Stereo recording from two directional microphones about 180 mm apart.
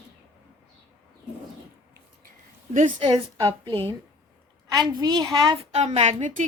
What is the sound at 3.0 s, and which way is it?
A woman's voice, 25° right (ahead or behind).